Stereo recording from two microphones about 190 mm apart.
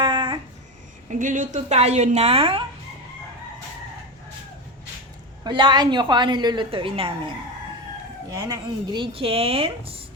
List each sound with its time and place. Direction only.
0.0 s a sound: 25° right (ahead or behind)
1.2 s a woman's voice: 40° right (ahead or behind)
5.4 s a woman's voice: 25° right (ahead or behind)
8.3 s a woman's voice: 20° right (ahead or behind)